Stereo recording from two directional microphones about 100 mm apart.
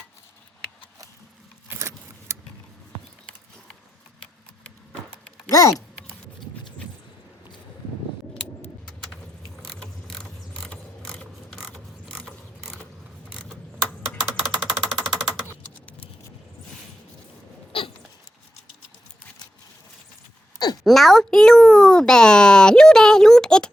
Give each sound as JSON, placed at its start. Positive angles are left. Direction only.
{"t": 1.7, "sound": "keys jangling", "side_deg": -30}
{"t": 5.5, "sound": "speech", "side_deg": 35}
{"t": 8.9, "sound": "bird", "side_deg": 5}
{"t": 9.6, "sound": "mechanisms", "side_deg": 5}
{"t": 11.5, "sound": "mechanisms", "side_deg": 0}
{"t": 13.3, "sound": "scissors", "side_deg": 10}
{"t": 14.4, "sound": "a sound", "side_deg": 5}
{"t": 15.4, "sound": "typing", "side_deg": 15}
{"t": 17.7, "sound": "a sound", "side_deg": 60}
{"t": 20.8, "sound": "a child's voice", "side_deg": 0}